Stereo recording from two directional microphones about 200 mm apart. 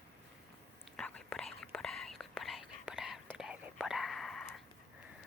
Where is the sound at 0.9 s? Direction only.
5° left (ahead or behind).